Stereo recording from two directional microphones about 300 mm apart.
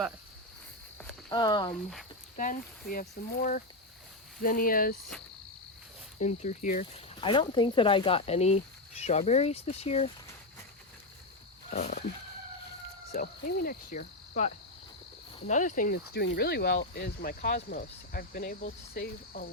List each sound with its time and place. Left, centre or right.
1.3 s speech: centre
2.3 s speech: left
6.1 s speech: left
11.7 s speech: left
13.1 s speech: left